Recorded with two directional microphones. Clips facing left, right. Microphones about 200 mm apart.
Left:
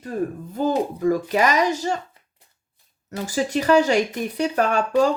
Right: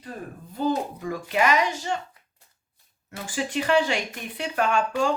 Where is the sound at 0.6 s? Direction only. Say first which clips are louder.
Left 5 dB; 45° left (ahead or behind).